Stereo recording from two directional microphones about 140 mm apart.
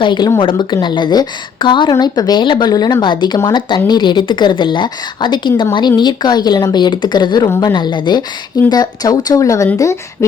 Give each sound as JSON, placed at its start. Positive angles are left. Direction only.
{"t": 0.0, "sound": "a woman's voice", "side_deg": 35}